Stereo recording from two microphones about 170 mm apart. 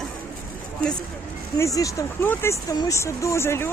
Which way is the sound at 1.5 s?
20° left (ahead or behind).